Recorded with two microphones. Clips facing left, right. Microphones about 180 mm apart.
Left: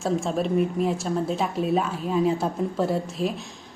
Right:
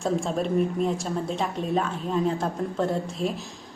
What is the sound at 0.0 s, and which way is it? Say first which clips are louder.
A woman's voice: left 1 dB; centre (ahead or behind).